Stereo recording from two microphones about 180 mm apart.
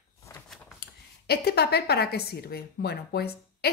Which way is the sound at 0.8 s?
60° left (ahead or behind).